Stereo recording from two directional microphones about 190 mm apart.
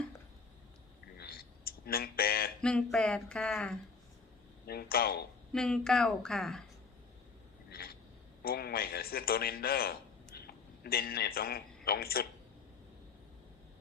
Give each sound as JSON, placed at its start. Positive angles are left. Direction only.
{"t": 1.2, "sound": "a sound", "side_deg": 50}
{"t": 2.6, "sound": "speech", "side_deg": 5}
{"t": 4.6, "sound": "speech", "side_deg": 55}
{"t": 5.5, "sound": "speech", "side_deg": 5}
{"t": 7.7, "sound": "a sound", "side_deg": 55}
{"t": 8.4, "sound": "a man's voice", "side_deg": 55}